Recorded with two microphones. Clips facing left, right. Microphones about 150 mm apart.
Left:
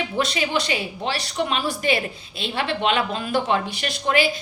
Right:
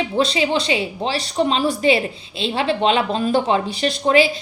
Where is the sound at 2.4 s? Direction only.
25° right (ahead or behind).